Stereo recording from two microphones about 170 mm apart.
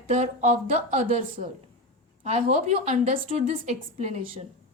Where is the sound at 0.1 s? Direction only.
45° right (ahead or behind).